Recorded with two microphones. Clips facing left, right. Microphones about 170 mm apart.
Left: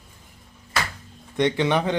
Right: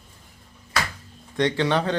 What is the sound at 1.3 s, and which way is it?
Speech, 15° left (ahead or behind).